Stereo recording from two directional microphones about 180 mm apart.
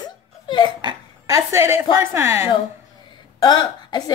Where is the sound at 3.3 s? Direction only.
25° left (ahead or behind).